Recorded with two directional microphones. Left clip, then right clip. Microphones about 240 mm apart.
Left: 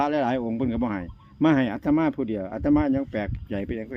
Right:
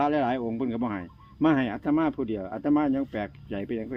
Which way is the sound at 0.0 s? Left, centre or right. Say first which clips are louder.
Left 1 dB; left.